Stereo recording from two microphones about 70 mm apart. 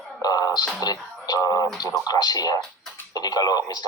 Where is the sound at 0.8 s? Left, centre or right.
Left.